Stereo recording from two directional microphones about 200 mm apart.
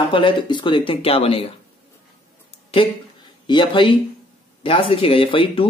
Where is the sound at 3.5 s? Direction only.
25° left (ahead or behind).